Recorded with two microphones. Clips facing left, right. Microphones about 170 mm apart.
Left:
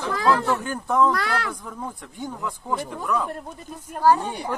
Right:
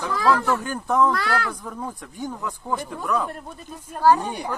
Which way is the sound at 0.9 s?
20° right (ahead or behind).